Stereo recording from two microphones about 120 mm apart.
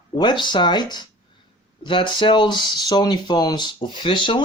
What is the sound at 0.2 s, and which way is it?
Speech, 40° left (ahead or behind).